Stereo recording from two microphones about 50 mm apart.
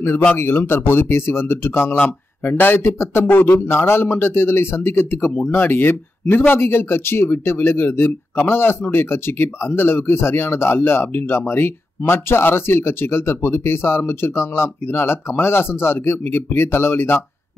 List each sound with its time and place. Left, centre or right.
0.4 s speech: left
2.0 s speech: left